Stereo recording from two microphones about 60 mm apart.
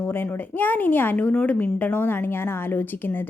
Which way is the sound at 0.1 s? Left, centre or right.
Left.